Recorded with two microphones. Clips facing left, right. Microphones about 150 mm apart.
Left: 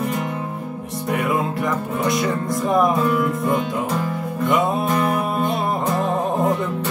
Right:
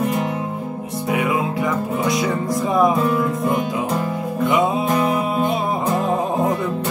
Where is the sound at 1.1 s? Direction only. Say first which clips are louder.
Right 1 dB; centre (ahead or behind).